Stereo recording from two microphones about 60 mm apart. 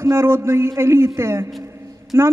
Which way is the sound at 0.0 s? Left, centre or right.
Right.